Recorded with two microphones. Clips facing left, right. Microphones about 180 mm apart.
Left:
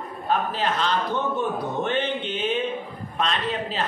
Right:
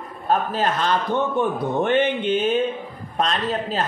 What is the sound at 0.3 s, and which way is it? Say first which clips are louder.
Speech: right 3 dB; 45° right (ahead or behind).